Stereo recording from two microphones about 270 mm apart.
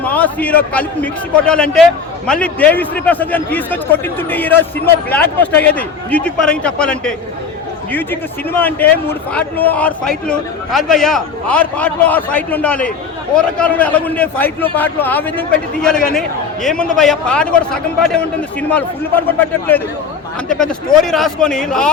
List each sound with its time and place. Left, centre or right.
0.0 s a man's voice: centre
18.7 s a man's voice: centre